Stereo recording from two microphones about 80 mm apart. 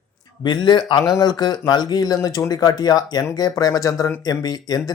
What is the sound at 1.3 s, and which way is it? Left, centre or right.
Speech, left.